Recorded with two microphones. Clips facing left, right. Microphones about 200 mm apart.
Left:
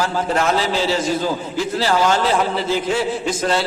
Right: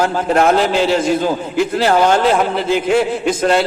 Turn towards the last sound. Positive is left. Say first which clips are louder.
# right 5 dB
turn(degrees=-60)  # may be behind; listen again after turning